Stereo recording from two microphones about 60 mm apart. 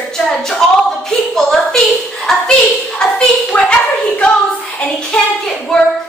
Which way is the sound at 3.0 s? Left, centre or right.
Centre.